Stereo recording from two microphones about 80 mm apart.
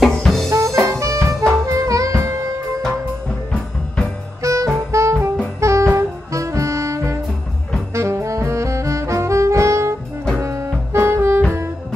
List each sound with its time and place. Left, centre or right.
0.0 s music: centre
0.5 s jazz: right
1.7 s saxophone: right
4.4 s music: right
7.9 s saxophone: right
10.4 s music: right